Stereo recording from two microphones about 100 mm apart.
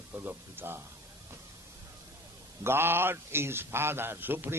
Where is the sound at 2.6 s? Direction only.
25° right (ahead or behind).